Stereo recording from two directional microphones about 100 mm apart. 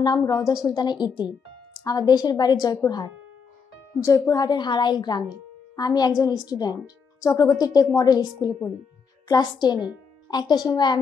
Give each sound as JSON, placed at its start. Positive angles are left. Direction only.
{"t": 0.0, "sound": "a woman's voice", "side_deg": 40}